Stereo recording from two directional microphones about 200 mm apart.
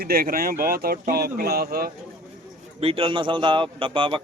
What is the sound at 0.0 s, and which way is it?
Speech, 50° right (ahead or behind).